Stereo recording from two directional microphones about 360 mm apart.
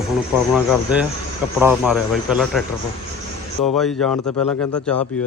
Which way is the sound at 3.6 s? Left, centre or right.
Centre.